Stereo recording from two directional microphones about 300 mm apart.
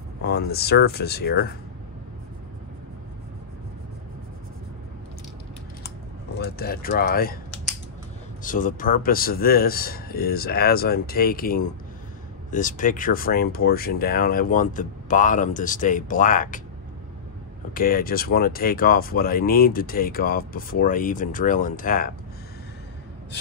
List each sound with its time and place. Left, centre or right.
0.2 s speech: left
5.9 s typing: left
8.4 s speech: left
17.7 s speech: left